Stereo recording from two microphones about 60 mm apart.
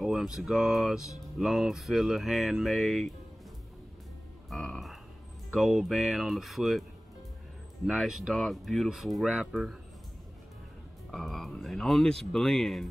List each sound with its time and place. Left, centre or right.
0.0 s speech: centre
4.5 s speech: centre
11.1 s speech: centre